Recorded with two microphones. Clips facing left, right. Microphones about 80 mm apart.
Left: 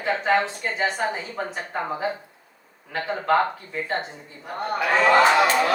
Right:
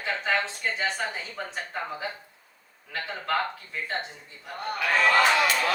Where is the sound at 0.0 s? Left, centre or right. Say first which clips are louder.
Left 6 dB; left.